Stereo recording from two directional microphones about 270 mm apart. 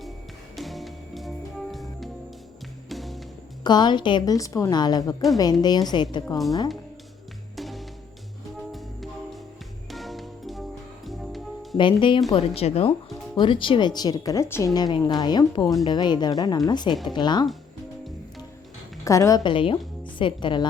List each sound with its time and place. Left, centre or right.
0.5 s music: centre
3.6 s a woman's voice: centre
7.5 s music: centre
11.8 s a woman's voice: centre
16.9 s speech: centre
17.2 s a woman's voice: centre
19.0 s a woman's voice: centre